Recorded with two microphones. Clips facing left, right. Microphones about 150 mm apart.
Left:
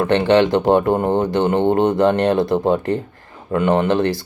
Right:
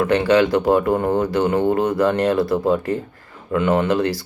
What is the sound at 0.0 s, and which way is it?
Speech, 25° left (ahead or behind).